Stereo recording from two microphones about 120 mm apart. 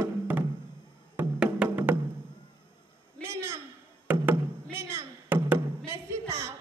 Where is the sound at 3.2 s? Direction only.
25° right (ahead or behind).